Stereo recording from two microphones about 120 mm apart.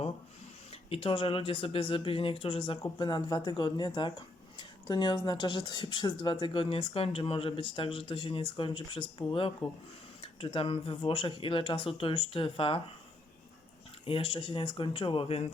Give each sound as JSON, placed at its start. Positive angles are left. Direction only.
{"t": 0.9, "sound": "speech", "side_deg": 50}
{"t": 14.0, "sound": "speech", "side_deg": 50}